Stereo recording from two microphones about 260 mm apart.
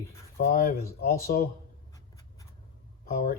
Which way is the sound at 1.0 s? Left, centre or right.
Left.